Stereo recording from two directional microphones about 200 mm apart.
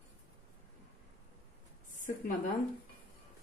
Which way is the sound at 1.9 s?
40° left (ahead or behind).